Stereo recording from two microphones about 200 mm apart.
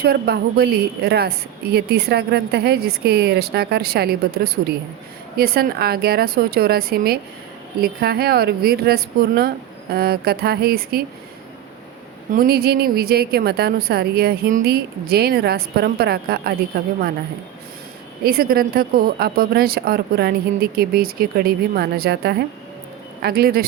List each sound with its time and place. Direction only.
0.0 s a woman's voice: 50° right (ahead or behind)
5.4 s a woman's voice: 50° right (ahead or behind)
12.3 s a woman's voice: 50° right (ahead or behind)
18.3 s a woman's voice: 50° right (ahead or behind)